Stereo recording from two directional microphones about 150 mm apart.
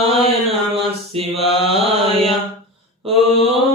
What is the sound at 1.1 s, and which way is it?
Mantra, 40° right (ahead or behind).